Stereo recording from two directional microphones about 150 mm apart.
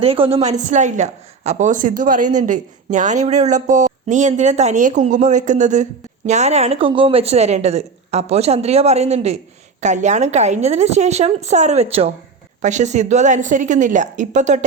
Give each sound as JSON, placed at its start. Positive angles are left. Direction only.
{"t": 0.0, "sound": "speech", "side_deg": -40}